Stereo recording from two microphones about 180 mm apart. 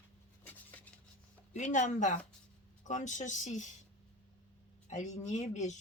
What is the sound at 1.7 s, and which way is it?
Speech, 45° left (ahead or behind).